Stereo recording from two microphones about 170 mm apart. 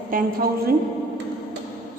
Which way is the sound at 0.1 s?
55° right (ahead or behind).